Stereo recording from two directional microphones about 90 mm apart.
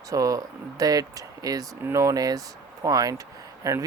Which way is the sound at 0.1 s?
40° right (ahead or behind).